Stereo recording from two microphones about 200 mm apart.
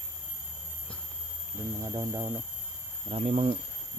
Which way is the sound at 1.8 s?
15° right (ahead or behind).